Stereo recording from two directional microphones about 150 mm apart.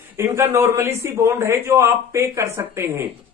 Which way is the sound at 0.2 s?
15° right (ahead or behind).